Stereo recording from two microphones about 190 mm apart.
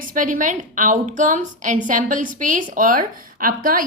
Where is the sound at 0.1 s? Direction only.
45° right (ahead or behind).